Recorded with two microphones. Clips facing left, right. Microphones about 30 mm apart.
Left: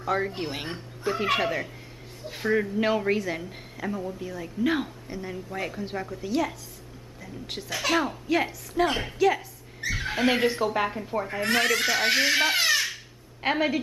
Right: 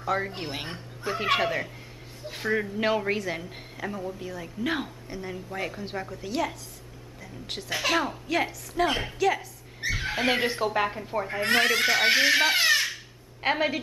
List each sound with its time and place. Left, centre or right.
0.0 s a woman's voice: centre
11.4 s speech: right
12.4 s speech: centre
12.9 s a sound: centre